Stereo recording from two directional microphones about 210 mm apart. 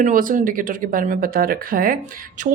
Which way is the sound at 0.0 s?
40° right (ahead or behind).